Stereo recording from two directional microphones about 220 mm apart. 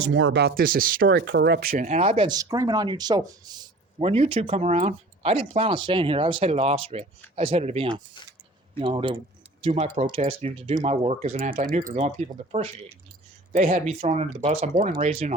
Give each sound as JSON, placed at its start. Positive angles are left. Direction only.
{"t": 0.1, "sound": "speech", "side_deg": -60}
{"t": 1.0, "sound": "speech", "side_deg": -55}